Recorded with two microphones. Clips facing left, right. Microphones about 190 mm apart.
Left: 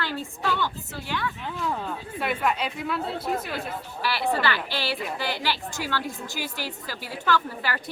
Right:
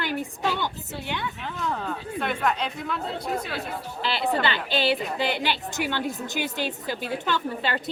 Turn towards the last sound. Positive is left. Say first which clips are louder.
# even
turn(degrees=-25)  # may be behind; listen again after turning